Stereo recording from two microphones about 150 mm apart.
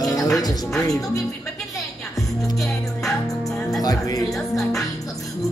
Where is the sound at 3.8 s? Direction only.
25° left (ahead or behind).